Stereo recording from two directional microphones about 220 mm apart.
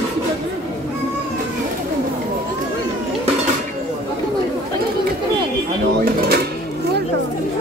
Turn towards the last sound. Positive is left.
turn(degrees=-45)  # may be behind; listen again after turning